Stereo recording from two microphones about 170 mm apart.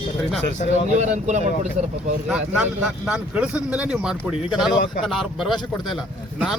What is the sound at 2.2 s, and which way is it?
Speech, 5° right (ahead or behind).